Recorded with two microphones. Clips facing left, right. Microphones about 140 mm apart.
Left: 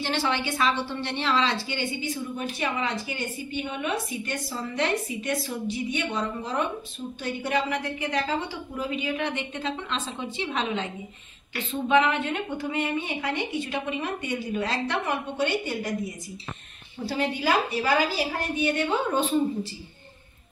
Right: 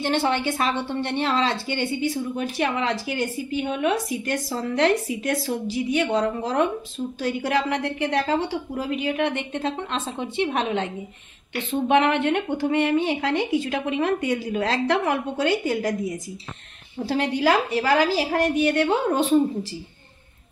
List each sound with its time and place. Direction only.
0.0 s a woman's voice: 50° right (ahead or behind); by 4.4 s 90° right
4.6 s a woman's voice: 75° right (ahead or behind)
17.1 s a woman's voice: 80° right